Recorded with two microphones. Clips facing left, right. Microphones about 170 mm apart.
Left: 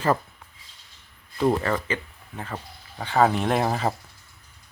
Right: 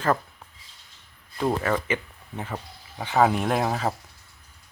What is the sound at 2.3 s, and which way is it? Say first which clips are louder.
Speech: right 1 dB; 15° right (ahead or behind).